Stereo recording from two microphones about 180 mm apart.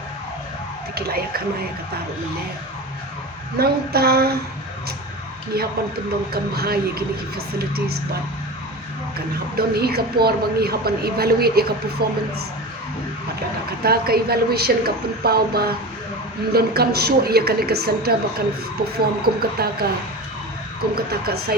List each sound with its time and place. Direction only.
0.9 s a woman's voice: 60° right (ahead or behind)
3.6 s a woman's voice: 60° right (ahead or behind)
5.5 s a woman's voice: 60° right (ahead or behind)
9.6 s a woman's voice: 60° right (ahead or behind)
13.8 s a woman's voice: 60° right (ahead or behind)
20.9 s a woman's voice: 60° right (ahead or behind)